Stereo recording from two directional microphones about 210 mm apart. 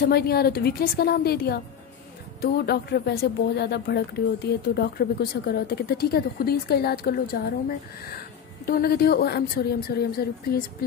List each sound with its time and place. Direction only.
0.0 s a woman's voice: 50° left (ahead or behind)
8.6 s a woman's voice: 45° left (ahead or behind)